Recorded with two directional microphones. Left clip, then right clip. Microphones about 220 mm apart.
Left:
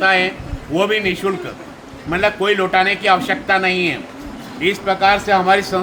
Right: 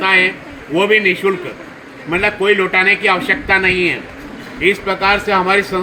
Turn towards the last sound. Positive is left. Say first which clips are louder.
# even
turn(degrees=15)  # may be behind; listen again after turning